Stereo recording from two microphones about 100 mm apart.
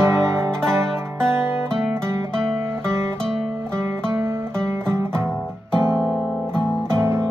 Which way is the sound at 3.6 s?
25° right (ahead or behind).